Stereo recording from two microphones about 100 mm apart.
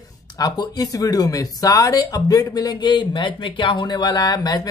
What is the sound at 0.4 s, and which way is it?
Speech, 40° left (ahead or behind).